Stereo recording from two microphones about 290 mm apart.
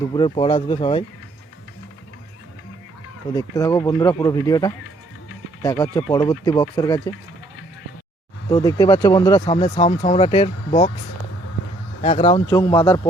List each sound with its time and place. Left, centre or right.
0.1 s speech: centre
3.3 s speech: centre
8.4 s speech: centre
12.0 s speech: centre